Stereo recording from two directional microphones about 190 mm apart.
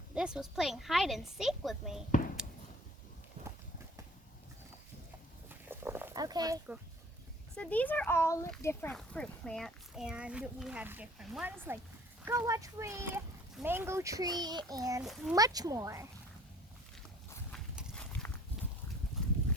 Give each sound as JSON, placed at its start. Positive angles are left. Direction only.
{"t": 0.1, "sound": "speech", "side_deg": -5}
{"t": 5.5, "sound": "a sound", "side_deg": -10}
{"t": 7.5, "sound": "a child's voice", "side_deg": 5}
{"t": 15.0, "sound": "speech", "side_deg": 0}
{"t": 15.4, "sound": "a child's voice", "side_deg": -20}
{"t": 17.5, "sound": "horse", "side_deg": 0}